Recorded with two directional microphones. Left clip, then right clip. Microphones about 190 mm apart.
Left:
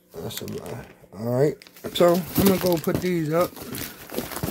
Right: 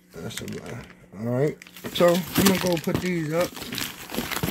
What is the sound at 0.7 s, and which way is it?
Speech, centre (ahead or behind).